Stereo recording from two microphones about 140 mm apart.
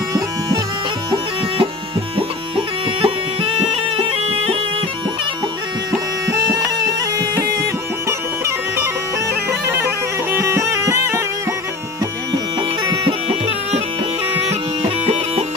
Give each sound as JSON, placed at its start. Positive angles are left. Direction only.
{"t": 3.0, "sound": "music", "side_deg": -40}
{"t": 8.1, "sound": "bagpipes", "side_deg": -20}
{"t": 9.3, "sound": "music", "side_deg": -20}
{"t": 13.0, "sound": "bagpipes", "side_deg": -45}
{"t": 14.5, "sound": "music", "side_deg": -50}